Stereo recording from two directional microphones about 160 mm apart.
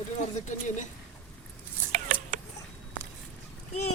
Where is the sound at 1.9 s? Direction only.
50° right (ahead or behind).